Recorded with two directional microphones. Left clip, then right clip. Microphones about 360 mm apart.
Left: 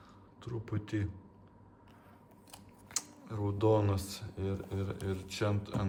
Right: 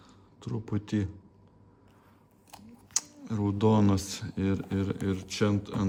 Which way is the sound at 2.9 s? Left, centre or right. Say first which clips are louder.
Right 7 dB; right.